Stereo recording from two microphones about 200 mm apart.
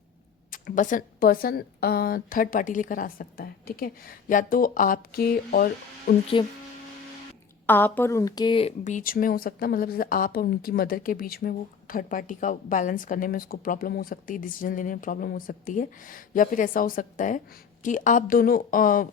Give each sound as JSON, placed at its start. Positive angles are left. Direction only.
{"t": 0.5, "sound": "a woman's voice", "side_deg": 40}
{"t": 6.3, "sound": "speech", "side_deg": 25}
{"t": 7.7, "sound": "a woman's voice", "side_deg": 10}